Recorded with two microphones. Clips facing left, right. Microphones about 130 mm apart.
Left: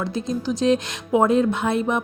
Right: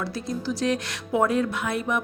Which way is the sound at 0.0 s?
20° left (ahead or behind).